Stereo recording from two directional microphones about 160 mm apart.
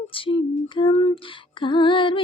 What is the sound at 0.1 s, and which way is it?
Female singing, 35° left (ahead or behind).